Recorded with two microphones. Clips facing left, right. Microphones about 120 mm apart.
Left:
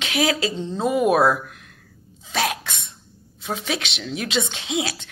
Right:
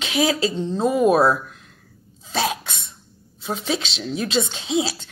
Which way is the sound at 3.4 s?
30° right (ahead or behind).